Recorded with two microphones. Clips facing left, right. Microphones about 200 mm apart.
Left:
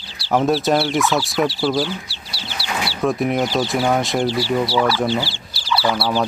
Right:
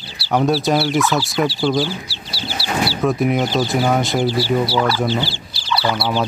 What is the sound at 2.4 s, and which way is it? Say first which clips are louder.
Chicken: right 5 dB; 35° right (ahead or behind).